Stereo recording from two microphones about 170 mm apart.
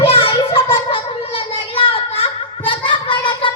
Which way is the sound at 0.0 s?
35° left (ahead or behind).